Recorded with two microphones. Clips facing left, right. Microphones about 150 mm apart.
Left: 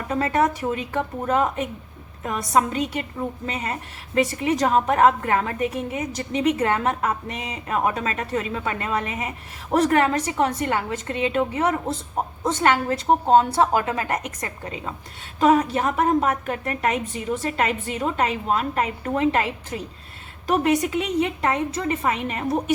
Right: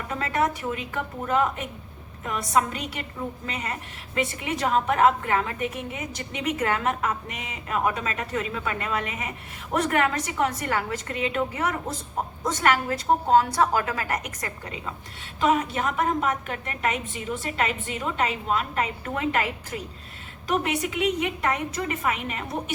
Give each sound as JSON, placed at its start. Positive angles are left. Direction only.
{"t": 0.1, "sound": "a woman's voice", "side_deg": 35}
{"t": 15.4, "sound": "a woman's voice", "side_deg": 40}